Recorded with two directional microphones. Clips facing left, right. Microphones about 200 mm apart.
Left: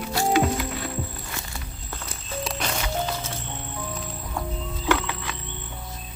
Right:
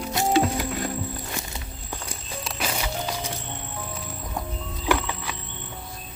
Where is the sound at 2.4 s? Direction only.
5° right (ahead or behind).